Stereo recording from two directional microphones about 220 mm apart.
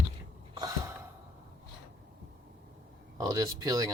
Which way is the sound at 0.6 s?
15° right (ahead or behind).